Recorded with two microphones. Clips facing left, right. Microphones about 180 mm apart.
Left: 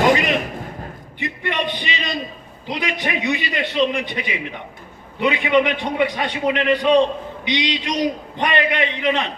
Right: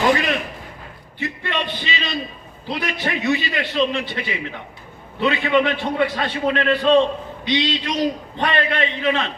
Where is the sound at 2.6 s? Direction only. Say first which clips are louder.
Even; 15° left (ahead or behind).